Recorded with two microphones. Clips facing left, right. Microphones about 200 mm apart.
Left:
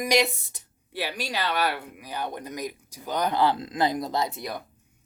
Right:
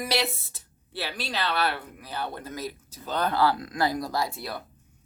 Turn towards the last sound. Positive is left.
turn(degrees=15)  # may be behind; listen again after turning